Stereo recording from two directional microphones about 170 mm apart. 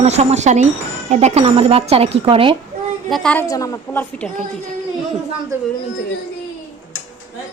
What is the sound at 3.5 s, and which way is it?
Speech, 20° left (ahead or behind).